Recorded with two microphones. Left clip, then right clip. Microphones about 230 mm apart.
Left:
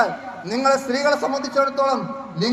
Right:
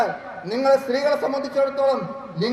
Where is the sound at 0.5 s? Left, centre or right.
Centre.